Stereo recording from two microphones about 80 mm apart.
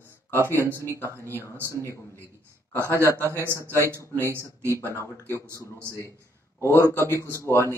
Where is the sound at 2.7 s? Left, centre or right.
Right.